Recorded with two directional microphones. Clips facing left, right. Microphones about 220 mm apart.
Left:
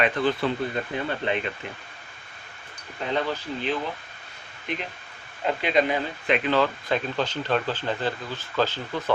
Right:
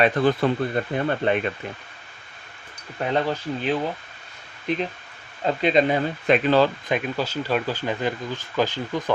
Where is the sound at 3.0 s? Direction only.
55° right (ahead or behind).